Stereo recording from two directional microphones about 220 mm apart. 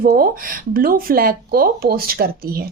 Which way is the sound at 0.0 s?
40° right (ahead or behind).